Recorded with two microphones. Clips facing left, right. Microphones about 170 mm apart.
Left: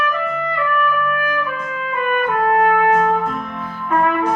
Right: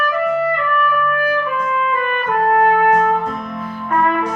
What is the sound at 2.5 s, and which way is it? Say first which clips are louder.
Music: right 2 dB; 45° right (ahead or behind).